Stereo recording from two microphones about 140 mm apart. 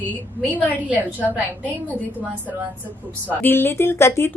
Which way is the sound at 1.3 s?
10° left (ahead or behind).